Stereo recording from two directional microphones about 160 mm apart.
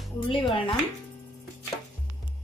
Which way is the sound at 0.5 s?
30° left (ahead or behind).